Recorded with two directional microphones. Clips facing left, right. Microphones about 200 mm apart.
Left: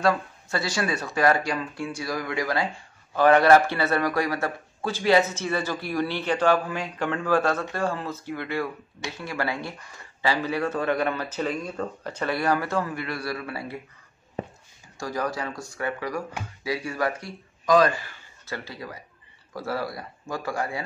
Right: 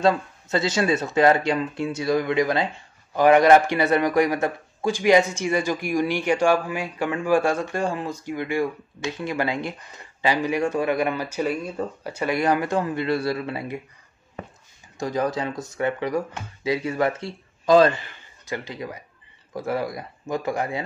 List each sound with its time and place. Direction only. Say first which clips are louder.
0.0 s speech: right 3 dB; 20° right (ahead or behind)
14.4 s a sound: left 4 dB; 30° left (ahead or behind)
15.0 s a man's voice: right 5 dB; 20° right (ahead or behind)